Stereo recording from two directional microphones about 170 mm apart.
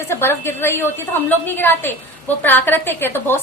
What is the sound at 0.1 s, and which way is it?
A woman's voice, 15° left (ahead or behind).